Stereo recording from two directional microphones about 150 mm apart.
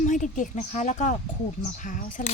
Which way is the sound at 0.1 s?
55° left (ahead or behind).